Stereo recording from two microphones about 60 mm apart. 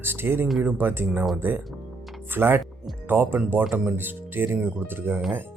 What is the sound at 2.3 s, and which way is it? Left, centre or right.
Speech, right.